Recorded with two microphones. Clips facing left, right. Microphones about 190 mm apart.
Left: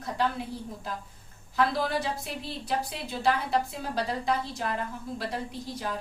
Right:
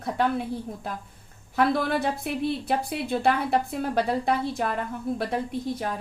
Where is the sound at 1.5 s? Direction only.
55° right (ahead or behind).